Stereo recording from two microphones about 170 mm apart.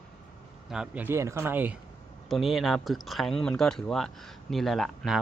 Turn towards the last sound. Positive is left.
turn(degrees=0)  # may be behind; listen again after turning